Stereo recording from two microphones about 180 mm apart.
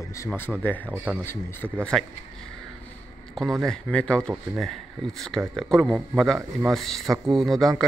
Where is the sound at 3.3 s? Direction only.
Centre (ahead or behind).